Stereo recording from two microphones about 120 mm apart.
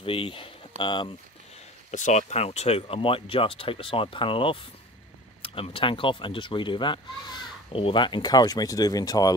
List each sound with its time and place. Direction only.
0.0 s speech: 50° left (ahead or behind)
1.9 s speech: 80° left; by 9.3 s 30° left (ahead or behind)